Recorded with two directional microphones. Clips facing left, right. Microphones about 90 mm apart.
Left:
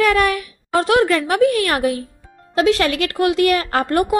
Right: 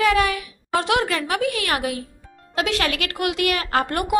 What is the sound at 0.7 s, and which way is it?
A woman's voice, 40° left (ahead or behind).